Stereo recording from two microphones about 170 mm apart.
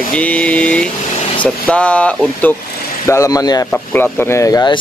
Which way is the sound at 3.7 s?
10° left (ahead or behind).